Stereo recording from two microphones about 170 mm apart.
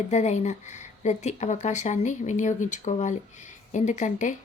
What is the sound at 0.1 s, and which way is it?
Speech, 40° left (ahead or behind).